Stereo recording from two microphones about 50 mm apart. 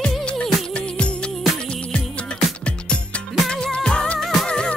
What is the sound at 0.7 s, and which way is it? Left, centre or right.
Music, left.